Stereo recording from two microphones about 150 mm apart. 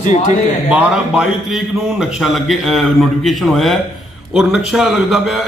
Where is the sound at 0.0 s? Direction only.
50° left (ahead or behind).